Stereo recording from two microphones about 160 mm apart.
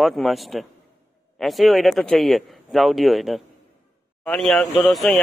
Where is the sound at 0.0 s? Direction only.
Centre (ahead or behind).